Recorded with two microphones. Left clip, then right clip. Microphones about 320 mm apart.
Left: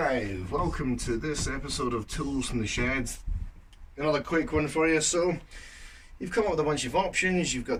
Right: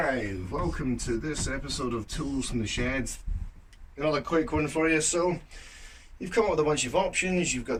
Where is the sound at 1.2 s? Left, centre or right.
Centre.